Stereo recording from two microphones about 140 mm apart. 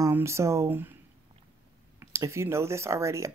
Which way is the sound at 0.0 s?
20° right (ahead or behind).